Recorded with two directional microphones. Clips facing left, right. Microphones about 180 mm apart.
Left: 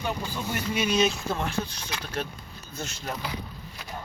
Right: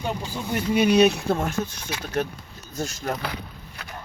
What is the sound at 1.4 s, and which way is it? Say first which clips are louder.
Speech: right 3 dB; 50° right (ahead or behind).